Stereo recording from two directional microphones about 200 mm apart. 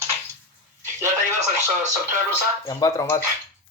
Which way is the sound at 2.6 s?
15° left (ahead or behind).